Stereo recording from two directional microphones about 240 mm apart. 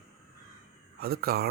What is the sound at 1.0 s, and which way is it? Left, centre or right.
Speech, right.